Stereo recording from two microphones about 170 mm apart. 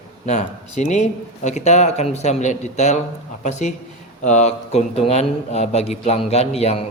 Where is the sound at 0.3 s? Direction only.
45° left (ahead or behind).